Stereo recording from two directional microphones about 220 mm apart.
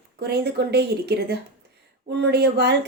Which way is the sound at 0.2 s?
45° right (ahead or behind).